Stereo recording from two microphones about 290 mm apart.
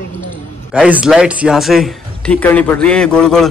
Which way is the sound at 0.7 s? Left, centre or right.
Centre.